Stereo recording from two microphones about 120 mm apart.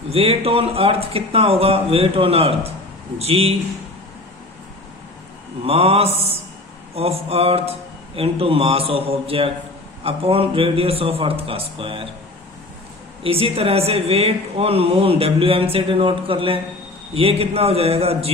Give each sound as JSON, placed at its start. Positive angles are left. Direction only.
{"t": 0.1, "sound": "a woman's voice", "side_deg": -55}
{"t": 5.6, "sound": "a man's voice", "side_deg": -55}
{"t": 13.2, "sound": "a woman's voice", "side_deg": -55}